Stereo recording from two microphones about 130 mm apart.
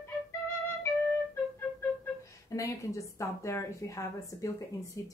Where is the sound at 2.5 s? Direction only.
25° left (ahead or behind).